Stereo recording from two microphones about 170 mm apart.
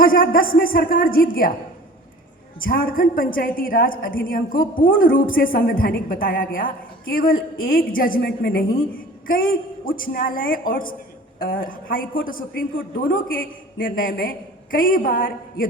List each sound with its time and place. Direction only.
0.0 s a woman's voice: 55° left (ahead or behind)
2.6 s a woman's voice: 55° left (ahead or behind)
9.8 s a woman's voice: 55° left (ahead or behind)